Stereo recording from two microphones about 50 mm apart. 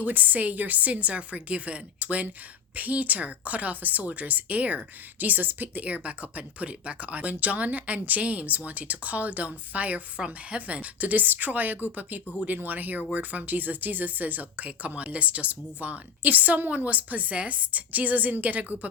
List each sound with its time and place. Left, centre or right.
0.0 s speech: right